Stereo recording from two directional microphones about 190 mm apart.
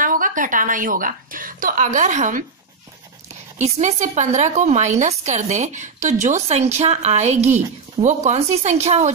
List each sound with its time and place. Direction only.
0.0 s a woman's voice: 45° right (ahead or behind)
3.5 s a woman's voice: 40° right (ahead or behind)